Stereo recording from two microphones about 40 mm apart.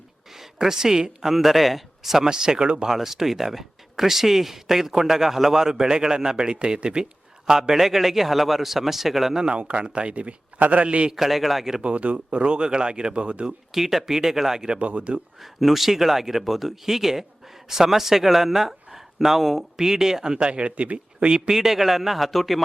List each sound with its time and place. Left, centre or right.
0.3 s a woman's voice: centre
1.2 s speech: centre; by 2.8 s right
2.8 s speech: centre
9.4 s a man's voice: right
11.2 s speech: centre
11.8 s speech: right
13.7 s speech: centre
14.8 s a man's voice: right
15.4 s speech: centre; by 21.3 s right
21.5 s speech: centre